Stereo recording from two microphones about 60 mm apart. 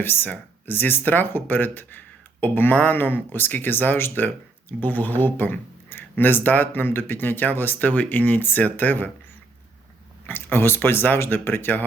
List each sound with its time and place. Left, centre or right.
0.0 s speech: left
10.2 s speech: left